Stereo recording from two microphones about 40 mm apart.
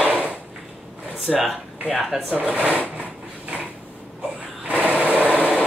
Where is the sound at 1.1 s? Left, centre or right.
Centre.